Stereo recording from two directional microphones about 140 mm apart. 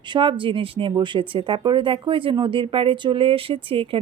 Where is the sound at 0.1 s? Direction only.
35° right (ahead or behind).